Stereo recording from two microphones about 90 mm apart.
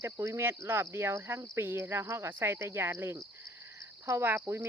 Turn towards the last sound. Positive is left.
turn(degrees=-30)  # may be behind; listen again after turning